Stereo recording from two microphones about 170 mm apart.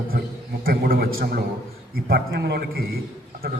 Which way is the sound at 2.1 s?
65° right (ahead or behind).